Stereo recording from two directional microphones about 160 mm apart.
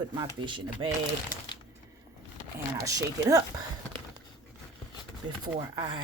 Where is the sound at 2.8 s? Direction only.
20° right (ahead or behind).